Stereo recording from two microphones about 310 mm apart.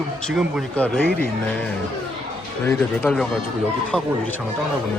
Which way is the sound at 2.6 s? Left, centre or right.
Centre.